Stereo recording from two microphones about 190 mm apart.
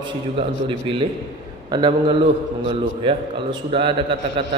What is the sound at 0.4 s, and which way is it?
A man's voice, 25° right (ahead or behind).